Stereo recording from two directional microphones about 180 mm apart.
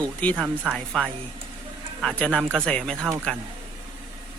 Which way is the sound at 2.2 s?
5° left (ahead or behind).